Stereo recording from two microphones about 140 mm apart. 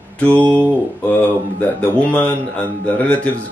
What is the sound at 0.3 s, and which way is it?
Mantra, 15° right (ahead or behind).